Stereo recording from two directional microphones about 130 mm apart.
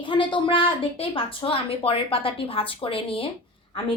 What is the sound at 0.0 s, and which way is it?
A woman's voice, 40° left (ahead or behind).